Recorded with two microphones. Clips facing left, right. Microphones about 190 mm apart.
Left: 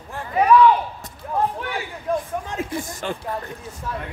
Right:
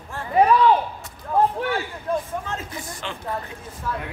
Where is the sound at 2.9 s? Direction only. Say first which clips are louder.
Left 5 dB; 45° left (ahead or behind).